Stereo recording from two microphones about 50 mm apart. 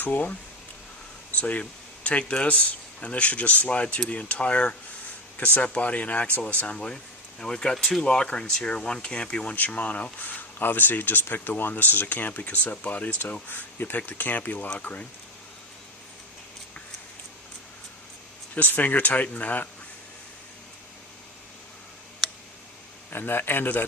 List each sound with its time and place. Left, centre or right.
0.0 s speech: left
1.4 s speech: left
6.7 s speech: centre; by 15.0 s left
18.5 s speech: left
23.0 s a man's voice: left